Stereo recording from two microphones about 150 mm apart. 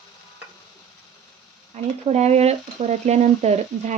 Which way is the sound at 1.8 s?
45° right (ahead or behind).